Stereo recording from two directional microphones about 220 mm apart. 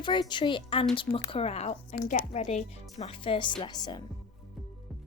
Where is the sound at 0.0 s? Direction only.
20° left (ahead or behind).